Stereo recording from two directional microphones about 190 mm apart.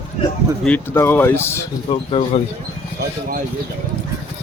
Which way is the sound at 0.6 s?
10° left (ahead or behind).